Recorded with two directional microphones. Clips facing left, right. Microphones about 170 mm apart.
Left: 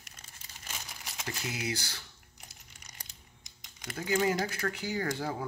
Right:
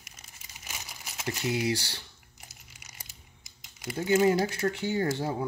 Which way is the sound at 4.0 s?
25° right (ahead or behind).